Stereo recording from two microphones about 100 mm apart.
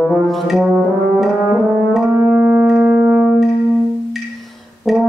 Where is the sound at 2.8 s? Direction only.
15° right (ahead or behind).